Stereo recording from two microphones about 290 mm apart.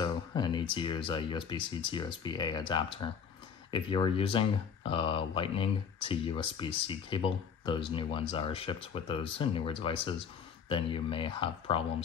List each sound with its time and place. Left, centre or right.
0.0 s speech: centre